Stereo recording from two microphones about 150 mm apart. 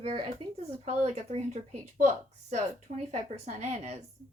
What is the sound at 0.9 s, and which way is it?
Speech, 45° right (ahead or behind).